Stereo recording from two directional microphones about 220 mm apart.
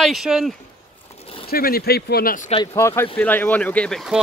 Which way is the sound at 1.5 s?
45° left (ahead or behind).